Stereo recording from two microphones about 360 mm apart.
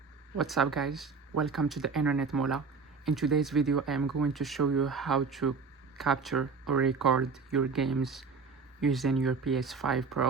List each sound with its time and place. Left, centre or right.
0.3 s speech: centre
4.0 s speech: right
4.3 s speech: centre